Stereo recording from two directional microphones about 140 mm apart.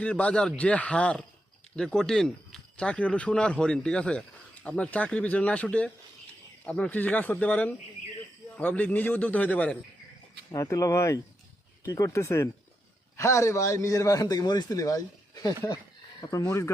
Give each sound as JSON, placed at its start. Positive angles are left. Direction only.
{"t": 0.0, "sound": "speech", "side_deg": 10}
{"t": 10.5, "sound": "a man's voice", "side_deg": 25}